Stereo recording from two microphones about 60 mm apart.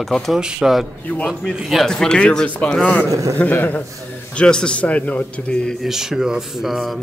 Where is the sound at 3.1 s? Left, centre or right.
Right.